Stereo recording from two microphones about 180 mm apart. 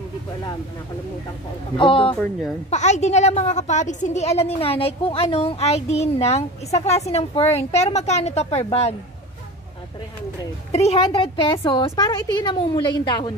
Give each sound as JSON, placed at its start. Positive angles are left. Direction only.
{"t": 1.8, "sound": "a woman's voice", "side_deg": 30}
{"t": 10.7, "sound": "a woman's voice", "side_deg": 35}